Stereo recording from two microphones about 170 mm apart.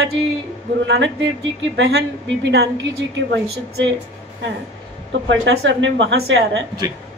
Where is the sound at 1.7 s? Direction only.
85° right.